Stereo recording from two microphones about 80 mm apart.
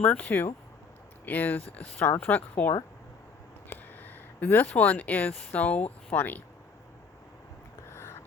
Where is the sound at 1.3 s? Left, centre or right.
Left.